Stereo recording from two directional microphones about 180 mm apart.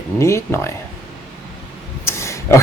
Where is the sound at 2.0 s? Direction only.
15° left (ahead or behind).